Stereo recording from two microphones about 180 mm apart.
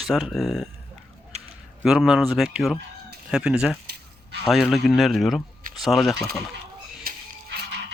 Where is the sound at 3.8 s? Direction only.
65° right (ahead or behind).